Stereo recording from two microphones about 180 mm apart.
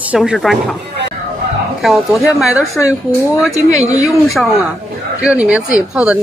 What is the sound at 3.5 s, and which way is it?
Speech, 20° left (ahead or behind).